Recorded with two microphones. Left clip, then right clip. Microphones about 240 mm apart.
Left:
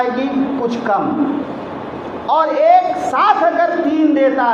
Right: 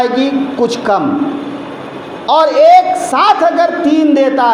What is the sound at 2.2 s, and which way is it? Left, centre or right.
A woman's voice, right.